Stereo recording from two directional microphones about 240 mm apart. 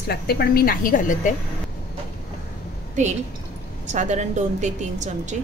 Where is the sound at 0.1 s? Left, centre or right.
Left.